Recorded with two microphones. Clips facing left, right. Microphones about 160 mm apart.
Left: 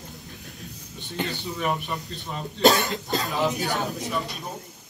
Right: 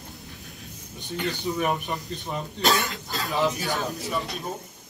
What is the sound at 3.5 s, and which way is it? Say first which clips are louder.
Speech: left 1 dB; 20° left (ahead or behind).